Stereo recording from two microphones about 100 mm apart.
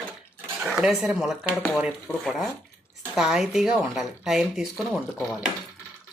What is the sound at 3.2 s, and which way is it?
Speech, 5° right (ahead or behind).